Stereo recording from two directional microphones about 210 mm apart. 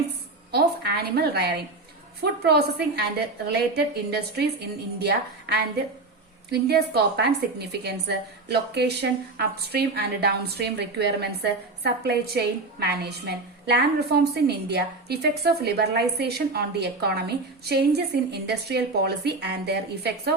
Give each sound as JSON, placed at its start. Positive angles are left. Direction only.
{"t": 0.5, "sound": "a woman's voice", "side_deg": -50}